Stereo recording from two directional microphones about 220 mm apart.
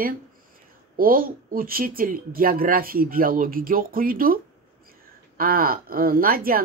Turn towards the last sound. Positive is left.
turn(degrees=-40)  # may be behind; listen again after turning